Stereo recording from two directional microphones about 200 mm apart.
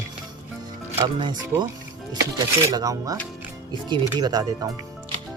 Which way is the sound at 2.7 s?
15° right (ahead or behind).